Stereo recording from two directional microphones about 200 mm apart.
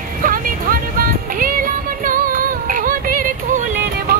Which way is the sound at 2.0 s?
45° right (ahead or behind).